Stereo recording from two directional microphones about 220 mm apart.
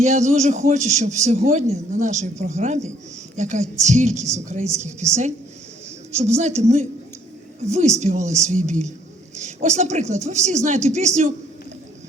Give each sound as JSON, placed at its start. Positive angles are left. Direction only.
{"t": 0.0, "sound": "a man's voice", "side_deg": -30}
{"t": 6.1, "sound": "a man's voice", "side_deg": -30}